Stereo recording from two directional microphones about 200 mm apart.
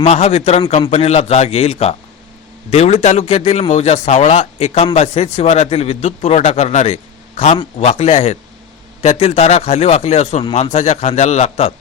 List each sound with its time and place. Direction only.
0.0 s a man's voice: 35° left (ahead or behind)